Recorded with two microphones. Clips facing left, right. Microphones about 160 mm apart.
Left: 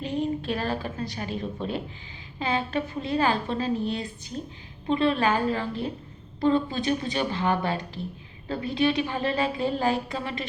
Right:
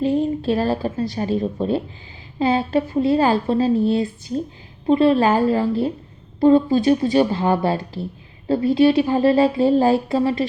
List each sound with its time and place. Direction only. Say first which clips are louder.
0.0 s a woman's voice: right 9 dB; 40° right (ahead or behind)